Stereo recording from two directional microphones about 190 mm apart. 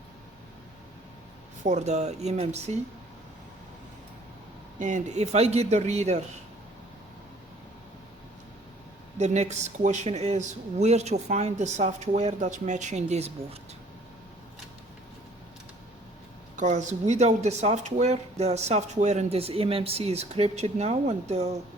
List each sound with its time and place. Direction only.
1.6 s speech: 35° right (ahead or behind)
4.8 s speech: 40° right (ahead or behind)
9.1 s speech: 35° right (ahead or behind)
16.6 s speech: 40° right (ahead or behind)